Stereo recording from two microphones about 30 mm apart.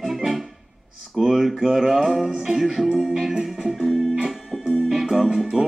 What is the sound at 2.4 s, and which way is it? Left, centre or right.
Music, centre.